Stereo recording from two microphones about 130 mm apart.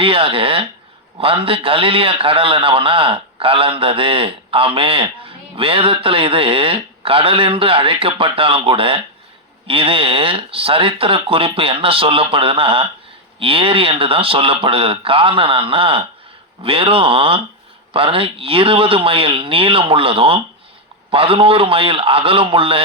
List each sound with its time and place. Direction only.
0.0 s a man's voice: 45° right (ahead or behind)